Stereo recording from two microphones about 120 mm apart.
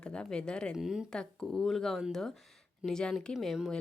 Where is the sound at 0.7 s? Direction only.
5° right (ahead or behind).